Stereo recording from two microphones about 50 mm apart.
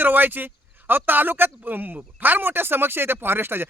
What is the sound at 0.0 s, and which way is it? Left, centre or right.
Speech, right.